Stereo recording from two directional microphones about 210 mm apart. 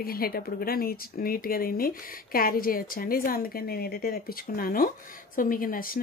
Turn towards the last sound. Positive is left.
turn(degrees=40)  # may be behind; listen again after turning